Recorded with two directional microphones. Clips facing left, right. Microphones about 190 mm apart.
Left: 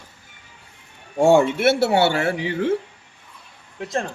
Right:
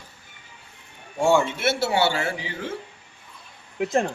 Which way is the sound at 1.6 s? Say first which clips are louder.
Left 5 dB; 60° left (ahead or behind).